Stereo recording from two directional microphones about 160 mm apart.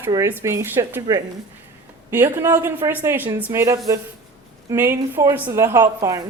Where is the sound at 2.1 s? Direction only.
15° right (ahead or behind).